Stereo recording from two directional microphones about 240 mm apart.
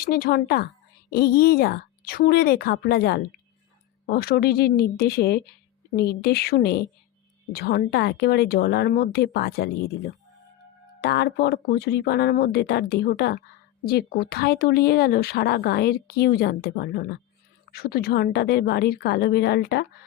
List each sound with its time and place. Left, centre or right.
0.0 s speech: left
11.0 s speech: left